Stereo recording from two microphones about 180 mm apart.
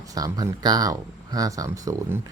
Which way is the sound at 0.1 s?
20° right (ahead or behind).